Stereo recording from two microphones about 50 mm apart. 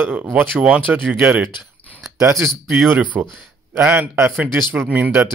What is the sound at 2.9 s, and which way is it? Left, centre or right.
Speech, right.